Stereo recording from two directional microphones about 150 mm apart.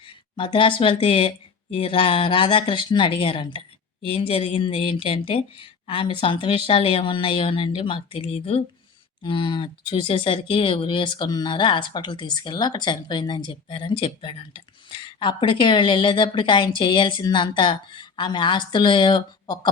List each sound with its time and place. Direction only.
0.0 s speech: 35° left (ahead or behind)